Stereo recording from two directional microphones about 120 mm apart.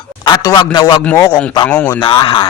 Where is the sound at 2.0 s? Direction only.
45° left (ahead or behind).